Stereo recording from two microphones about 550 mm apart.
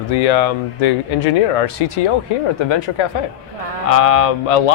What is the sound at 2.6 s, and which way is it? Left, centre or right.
Speech, left.